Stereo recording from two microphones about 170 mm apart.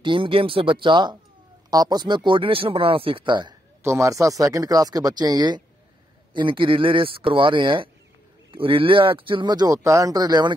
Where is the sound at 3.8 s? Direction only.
15° right (ahead or behind).